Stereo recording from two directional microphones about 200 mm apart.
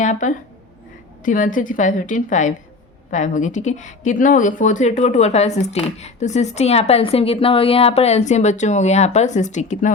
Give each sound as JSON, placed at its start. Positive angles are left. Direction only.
{"t": 0.0, "sound": "a woman's voice", "side_deg": 40}